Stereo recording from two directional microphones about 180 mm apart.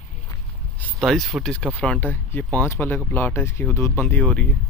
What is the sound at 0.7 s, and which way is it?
Speech, 5° left (ahead or behind).